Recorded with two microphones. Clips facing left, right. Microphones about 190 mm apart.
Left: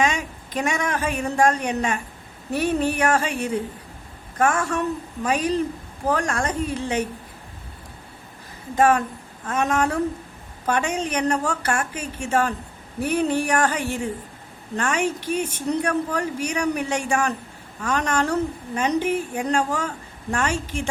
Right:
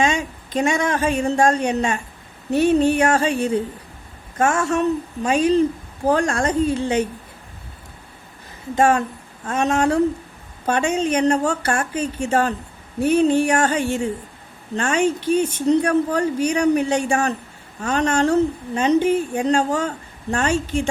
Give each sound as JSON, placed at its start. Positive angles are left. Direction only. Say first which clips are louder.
{"t": 0.0, "sound": "a woman's voice", "louder": "right 3 dB", "side_deg": -30}
{"t": 8.7, "sound": "a woman's voice", "louder": "right 1 dB", "side_deg": -30}